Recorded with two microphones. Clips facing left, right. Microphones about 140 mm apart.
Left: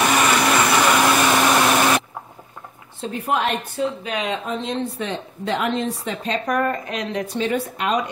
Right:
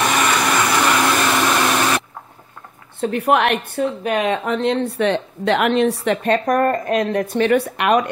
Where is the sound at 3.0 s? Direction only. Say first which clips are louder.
Right 6 dB; 70° right (ahead or behind).